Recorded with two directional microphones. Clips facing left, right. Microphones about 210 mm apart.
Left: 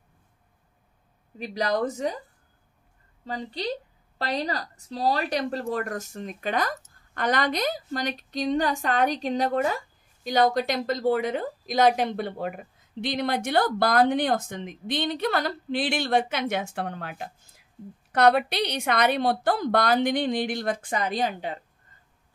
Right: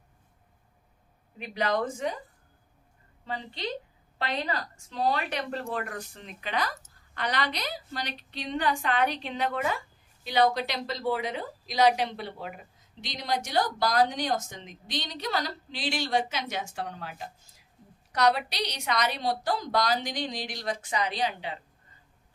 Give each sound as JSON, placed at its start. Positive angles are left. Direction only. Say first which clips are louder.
{"t": 1.4, "sound": "speech", "louder": "left 3 dB", "side_deg": 40}
{"t": 3.3, "sound": "a woman's voice", "louder": "left 4 dB", "side_deg": 40}